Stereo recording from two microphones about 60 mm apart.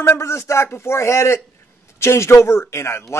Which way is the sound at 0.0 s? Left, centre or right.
Left.